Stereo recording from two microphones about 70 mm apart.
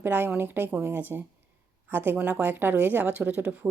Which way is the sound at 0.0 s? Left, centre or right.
Right.